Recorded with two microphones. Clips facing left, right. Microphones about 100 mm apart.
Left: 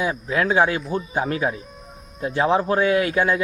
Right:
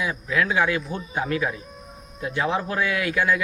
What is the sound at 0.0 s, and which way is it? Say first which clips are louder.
Speech: left 2 dB; 35° left (ahead or behind).